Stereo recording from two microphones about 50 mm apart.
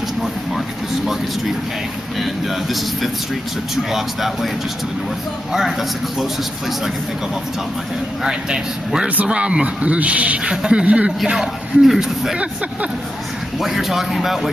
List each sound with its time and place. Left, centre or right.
2.1 s speech: centre
5.5 s speech: centre
8.2 s a man's voice: centre
11.3 s a man's voice: centre
13.6 s speech: centre